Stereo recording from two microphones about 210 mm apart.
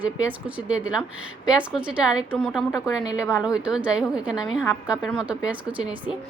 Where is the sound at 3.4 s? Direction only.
5° right (ahead or behind).